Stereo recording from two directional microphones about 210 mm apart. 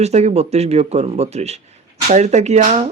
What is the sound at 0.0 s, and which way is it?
Speech, 30° right (ahead or behind).